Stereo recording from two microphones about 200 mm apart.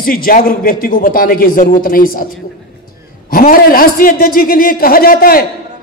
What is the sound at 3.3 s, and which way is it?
A man's voice, 45° left (ahead or behind).